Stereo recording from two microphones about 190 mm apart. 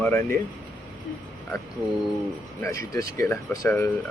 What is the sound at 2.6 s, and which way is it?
Speech, 15° left (ahead or behind).